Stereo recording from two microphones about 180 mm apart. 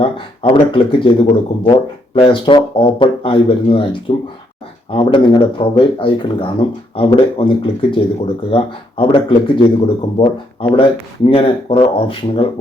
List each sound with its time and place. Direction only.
0.0 s speech: 30° left (ahead or behind)